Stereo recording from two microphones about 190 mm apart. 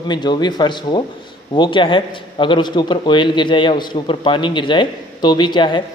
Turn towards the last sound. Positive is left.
turn(degrees=25)  # may be behind; listen again after turning